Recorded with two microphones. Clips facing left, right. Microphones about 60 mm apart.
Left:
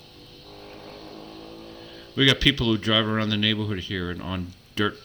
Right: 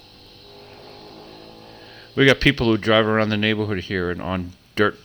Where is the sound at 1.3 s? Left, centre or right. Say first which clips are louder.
Left 1 dB; right.